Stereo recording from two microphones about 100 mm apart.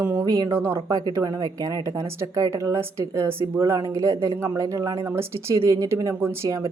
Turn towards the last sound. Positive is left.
turn(degrees=-30)  # may be behind; listen again after turning